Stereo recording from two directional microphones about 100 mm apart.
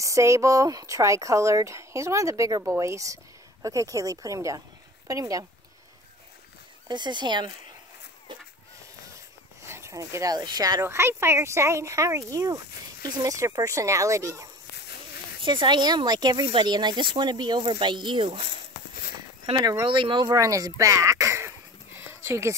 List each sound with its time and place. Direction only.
0.0 s speech: 30° right (ahead or behind)
6.9 s speech: 50° right (ahead or behind)
8.3 s a sound: 50° right (ahead or behind)
9.7 s speech: 30° right (ahead or behind)
10.8 s speech: 25° right (ahead or behind)
15.4 s speech: 50° right (ahead or behind)
19.8 s speech: 55° right (ahead or behind)
20.3 s speech: 35° right (ahead or behind)